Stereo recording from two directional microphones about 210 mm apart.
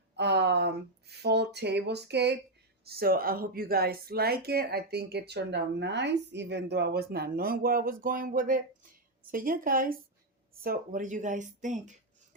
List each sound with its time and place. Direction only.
0.2 s speech: 55° right (ahead or behind); by 11.9 s 35° right (ahead or behind)